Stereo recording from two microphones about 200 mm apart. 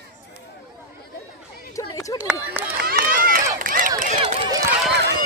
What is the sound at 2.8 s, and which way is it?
Run, 45° right (ahead or behind).